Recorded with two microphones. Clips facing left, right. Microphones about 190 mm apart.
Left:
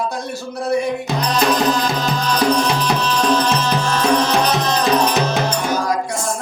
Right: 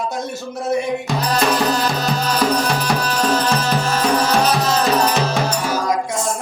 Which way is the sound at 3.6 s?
5° right (ahead or behind).